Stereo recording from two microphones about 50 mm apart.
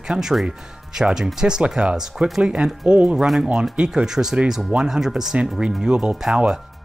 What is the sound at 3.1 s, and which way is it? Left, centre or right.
Speech, centre.